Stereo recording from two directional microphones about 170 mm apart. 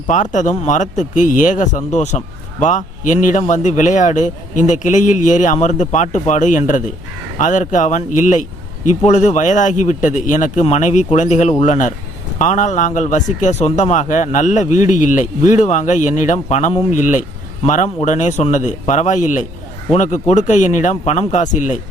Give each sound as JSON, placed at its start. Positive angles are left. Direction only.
{"t": 0.1, "sound": "a man's voice", "side_deg": 45}